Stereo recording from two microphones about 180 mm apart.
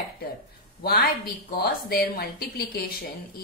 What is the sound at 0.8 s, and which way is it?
A woman's voice, 60° left (ahead or behind).